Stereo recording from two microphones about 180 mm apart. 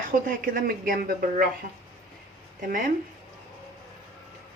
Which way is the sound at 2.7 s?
50° right (ahead or behind).